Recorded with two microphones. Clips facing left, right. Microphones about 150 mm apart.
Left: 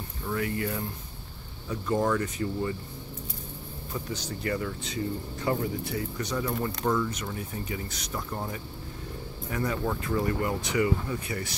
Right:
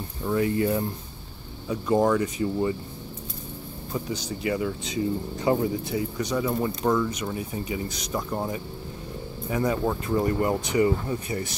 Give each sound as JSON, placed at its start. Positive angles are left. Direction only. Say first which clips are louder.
{"t": 0.3, "sound": "speech", "louder": "right 7 dB", "side_deg": -25}
{"t": 1.7, "sound": "speech", "louder": "right 5 dB", "side_deg": -15}
{"t": 3.9, "sound": "speech", "louder": "right 4 dB", "side_deg": -15}